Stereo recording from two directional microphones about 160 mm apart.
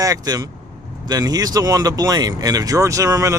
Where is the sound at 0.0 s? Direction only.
20° right (ahead or behind).